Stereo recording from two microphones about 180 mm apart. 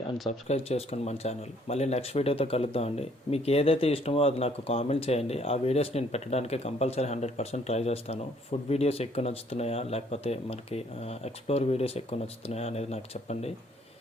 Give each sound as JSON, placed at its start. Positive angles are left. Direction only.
{"t": 0.4, "sound": "speech", "side_deg": 35}